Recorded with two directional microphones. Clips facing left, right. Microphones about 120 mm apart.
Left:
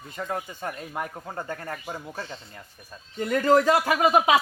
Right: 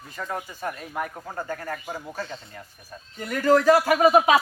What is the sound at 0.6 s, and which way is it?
Speech, 25° left (ahead or behind).